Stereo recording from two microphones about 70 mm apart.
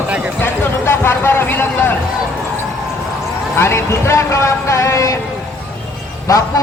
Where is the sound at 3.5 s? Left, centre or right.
Left.